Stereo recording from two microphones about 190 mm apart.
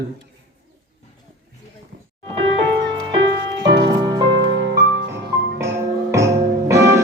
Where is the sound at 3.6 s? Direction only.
60° right (ahead or behind).